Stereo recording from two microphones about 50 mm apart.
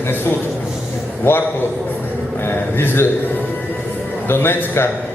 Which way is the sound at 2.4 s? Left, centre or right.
Left.